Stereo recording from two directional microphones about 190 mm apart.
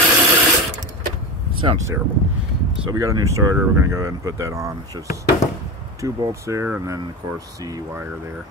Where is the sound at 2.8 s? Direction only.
20° right (ahead or behind).